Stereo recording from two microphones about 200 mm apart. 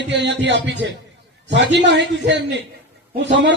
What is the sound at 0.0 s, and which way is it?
A man's voice, 60° right (ahead or behind).